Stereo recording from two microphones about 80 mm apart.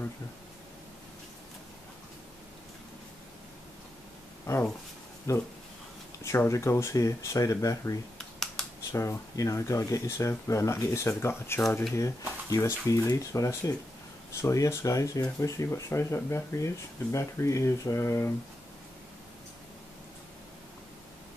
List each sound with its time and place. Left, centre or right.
4.5 s a sound: left
5.3 s speech: left
11.9 s speech: left